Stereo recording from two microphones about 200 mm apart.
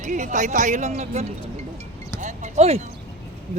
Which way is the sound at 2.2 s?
35° right (ahead or behind).